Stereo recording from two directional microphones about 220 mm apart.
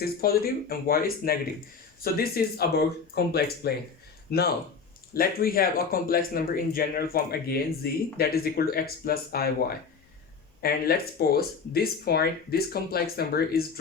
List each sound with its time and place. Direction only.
0.0 s speech: 45° left (ahead or behind)